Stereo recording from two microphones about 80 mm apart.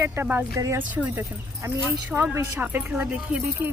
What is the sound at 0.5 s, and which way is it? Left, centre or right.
Speech, right.